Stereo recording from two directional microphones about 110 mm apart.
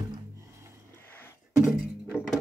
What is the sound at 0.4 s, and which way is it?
Music, 25° right (ahead or behind).